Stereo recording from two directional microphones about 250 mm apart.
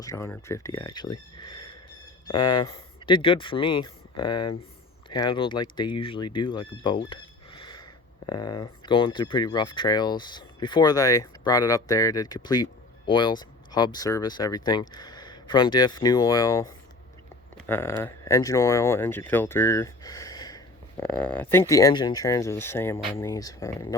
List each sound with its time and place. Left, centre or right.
0.0 s speech: centre
7.1 s a sound: centre
8.3 s speech: centre
17.7 s speech: centre